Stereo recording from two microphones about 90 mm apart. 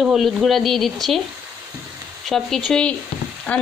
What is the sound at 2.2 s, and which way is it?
A woman's voice, centre (ahead or behind).